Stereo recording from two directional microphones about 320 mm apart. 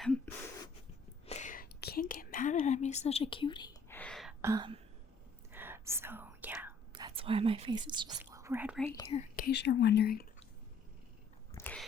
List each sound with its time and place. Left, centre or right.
1.3 s whispering: left; by 8.9 s centre
9.0 s speech: centre
11.5 s a sound: centre